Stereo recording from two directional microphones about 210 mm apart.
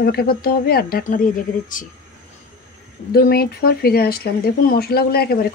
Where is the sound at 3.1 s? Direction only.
45° left (ahead or behind).